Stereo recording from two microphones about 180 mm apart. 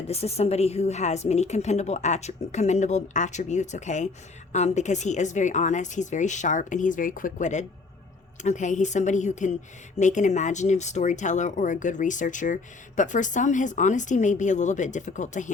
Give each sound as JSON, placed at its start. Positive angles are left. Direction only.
{"t": 0.1, "sound": "a woman's voice", "side_deg": 35}